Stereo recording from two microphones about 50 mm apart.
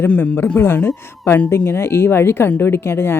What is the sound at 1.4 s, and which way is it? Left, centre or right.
Speech, left.